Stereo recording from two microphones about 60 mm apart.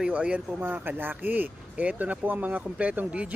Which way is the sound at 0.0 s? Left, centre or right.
Centre.